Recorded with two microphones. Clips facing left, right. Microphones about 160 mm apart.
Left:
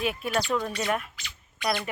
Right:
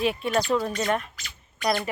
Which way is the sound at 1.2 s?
45° right (ahead or behind).